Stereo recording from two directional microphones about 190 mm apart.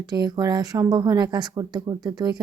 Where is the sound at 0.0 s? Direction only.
20° right (ahead or behind).